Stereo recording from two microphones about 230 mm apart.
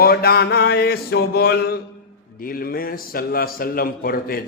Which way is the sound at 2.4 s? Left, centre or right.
Left.